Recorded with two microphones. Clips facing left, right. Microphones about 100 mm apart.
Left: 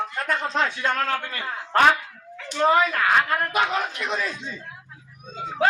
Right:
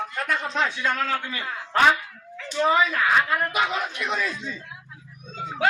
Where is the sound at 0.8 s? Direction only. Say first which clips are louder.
Left 1 dB; 55° left (ahead or behind).